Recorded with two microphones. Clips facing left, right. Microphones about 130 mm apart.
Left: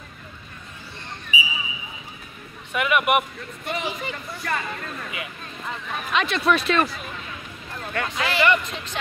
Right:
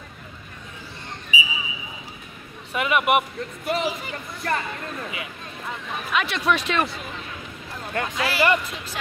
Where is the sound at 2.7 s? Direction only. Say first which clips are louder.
Even; 25° right (ahead or behind).